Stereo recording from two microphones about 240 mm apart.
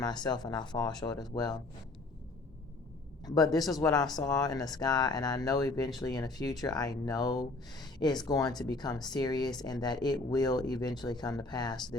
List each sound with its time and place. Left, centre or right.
0.0 s speech: centre
3.2 s speech: centre